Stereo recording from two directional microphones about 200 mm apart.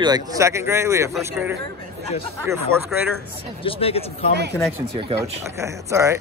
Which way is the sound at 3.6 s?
30° left (ahead or behind).